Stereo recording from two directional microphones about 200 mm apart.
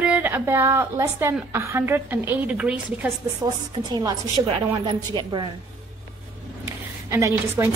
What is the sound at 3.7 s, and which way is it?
A woman's voice, 20° right (ahead or behind).